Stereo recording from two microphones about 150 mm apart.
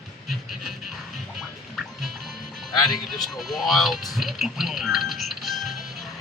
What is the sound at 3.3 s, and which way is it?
Speech, centre (ahead or behind).